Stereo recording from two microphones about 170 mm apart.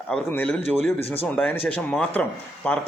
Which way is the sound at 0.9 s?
35° left (ahead or behind).